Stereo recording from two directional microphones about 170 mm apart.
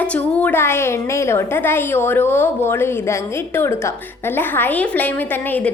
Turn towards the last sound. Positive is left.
turn(degrees=10)  # may be behind; listen again after turning